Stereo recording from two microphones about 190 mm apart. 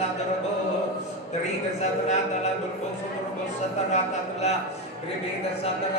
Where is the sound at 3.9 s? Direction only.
35° left (ahead or behind).